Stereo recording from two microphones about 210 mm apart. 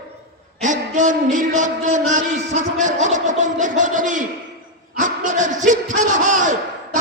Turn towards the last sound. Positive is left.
turn(degrees=-35)  # may be behind; listen again after turning